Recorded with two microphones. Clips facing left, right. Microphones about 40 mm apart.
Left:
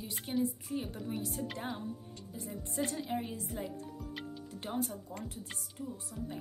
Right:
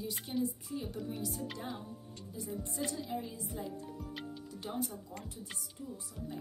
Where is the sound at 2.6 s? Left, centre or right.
Left.